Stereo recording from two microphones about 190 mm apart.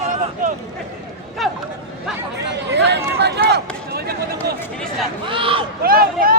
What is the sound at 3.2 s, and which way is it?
Run, 60° right (ahead or behind).